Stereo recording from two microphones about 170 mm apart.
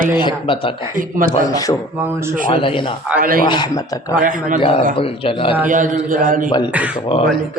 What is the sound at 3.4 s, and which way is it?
Speech, 25° left (ahead or behind).